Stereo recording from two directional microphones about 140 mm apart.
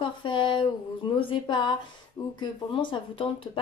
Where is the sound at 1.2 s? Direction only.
30° left (ahead or behind).